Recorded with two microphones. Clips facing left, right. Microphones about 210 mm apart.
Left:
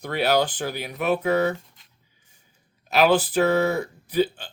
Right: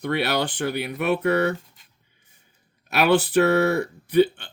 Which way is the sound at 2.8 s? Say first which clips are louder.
Even; 65° right (ahead or behind).